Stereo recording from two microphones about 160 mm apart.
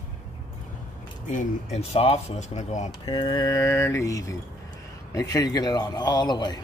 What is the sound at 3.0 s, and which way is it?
A man's voice, 30° left (ahead or behind).